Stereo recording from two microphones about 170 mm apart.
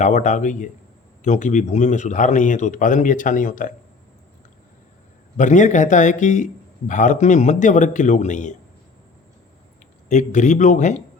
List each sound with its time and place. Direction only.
0.0 s a man's voice: 45° left (ahead or behind)
5.4 s a man's voice: 45° left (ahead or behind)
10.1 s a man's voice: 45° left (ahead or behind)